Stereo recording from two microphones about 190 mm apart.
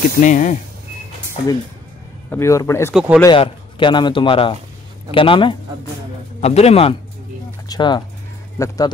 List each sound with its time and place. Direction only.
0.2 s a man's voice: 40° left (ahead or behind)
2.2 s speech: 15° left (ahead or behind)
2.9 s speech: 5° right (ahead or behind)
3.3 s a man's voice: 25° left (ahead or behind)